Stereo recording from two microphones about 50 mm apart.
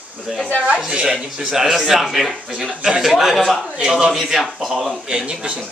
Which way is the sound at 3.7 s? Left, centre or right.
Centre.